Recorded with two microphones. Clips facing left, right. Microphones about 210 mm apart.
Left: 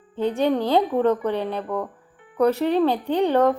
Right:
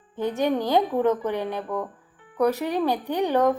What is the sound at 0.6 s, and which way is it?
A woman's voice, 15° right (ahead or behind).